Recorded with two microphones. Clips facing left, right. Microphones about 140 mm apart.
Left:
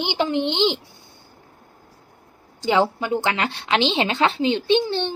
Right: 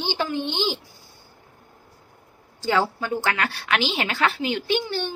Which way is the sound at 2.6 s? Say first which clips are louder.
Left 3 dB; 20° left (ahead or behind).